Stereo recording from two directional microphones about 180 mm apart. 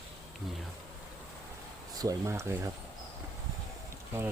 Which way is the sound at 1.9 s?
20° right (ahead or behind).